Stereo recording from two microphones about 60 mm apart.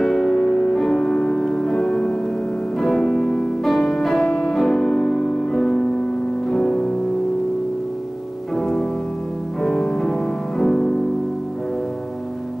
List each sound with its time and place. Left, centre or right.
0.0 s music: centre
4.3 s music: centre
8.5 s music: centre
9.6 s music: centre